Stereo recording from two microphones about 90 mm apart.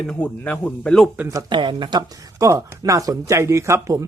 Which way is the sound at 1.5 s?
65° right (ahead or behind).